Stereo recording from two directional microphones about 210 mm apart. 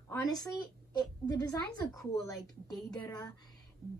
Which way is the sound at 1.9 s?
15° left (ahead or behind).